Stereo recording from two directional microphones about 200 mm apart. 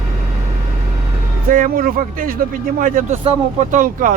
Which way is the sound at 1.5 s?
45° right (ahead or behind).